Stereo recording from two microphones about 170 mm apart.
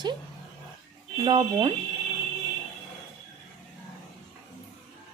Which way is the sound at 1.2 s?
25° right (ahead or behind).